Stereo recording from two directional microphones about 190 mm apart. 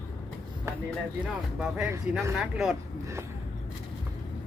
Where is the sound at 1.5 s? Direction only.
5° right (ahead or behind).